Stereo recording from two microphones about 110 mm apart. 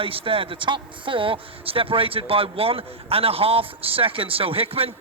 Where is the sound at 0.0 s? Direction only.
55° right (ahead or behind).